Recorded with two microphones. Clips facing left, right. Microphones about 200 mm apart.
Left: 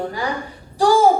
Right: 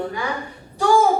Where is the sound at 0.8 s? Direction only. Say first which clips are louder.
Left 2 dB; 35° left (ahead or behind).